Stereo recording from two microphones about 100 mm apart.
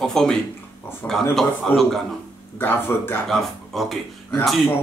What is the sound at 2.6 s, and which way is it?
Speech, 20° left (ahead or behind).